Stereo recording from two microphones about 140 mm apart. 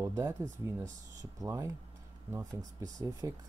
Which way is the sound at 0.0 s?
20° right (ahead or behind).